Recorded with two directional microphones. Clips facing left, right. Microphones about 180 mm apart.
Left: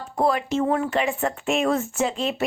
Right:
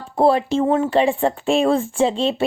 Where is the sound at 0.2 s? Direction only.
30° right (ahead or behind).